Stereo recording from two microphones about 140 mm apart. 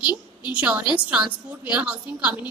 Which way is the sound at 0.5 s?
10° right (ahead or behind).